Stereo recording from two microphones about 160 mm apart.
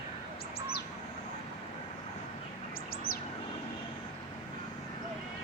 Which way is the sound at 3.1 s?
35° left (ahead or behind).